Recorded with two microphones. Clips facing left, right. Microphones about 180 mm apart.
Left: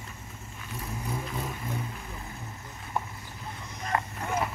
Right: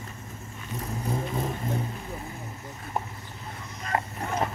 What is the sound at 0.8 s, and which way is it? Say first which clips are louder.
Vehicle: right 4 dB; 40° right (ahead or behind).